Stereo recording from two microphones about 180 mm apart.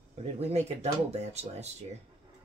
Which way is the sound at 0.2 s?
35° right (ahead or behind).